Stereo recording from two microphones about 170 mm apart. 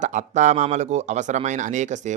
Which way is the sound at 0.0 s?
45° right (ahead or behind).